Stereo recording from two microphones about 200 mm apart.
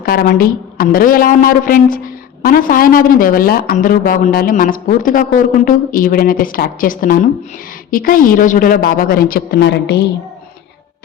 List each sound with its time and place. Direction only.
0.0 s speech: 50° left (ahead or behind)